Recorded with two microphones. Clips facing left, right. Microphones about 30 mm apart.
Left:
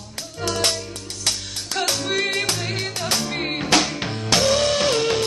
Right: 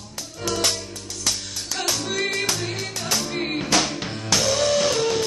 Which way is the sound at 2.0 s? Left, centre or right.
Centre.